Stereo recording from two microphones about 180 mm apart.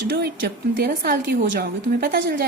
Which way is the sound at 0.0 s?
65° right (ahead or behind).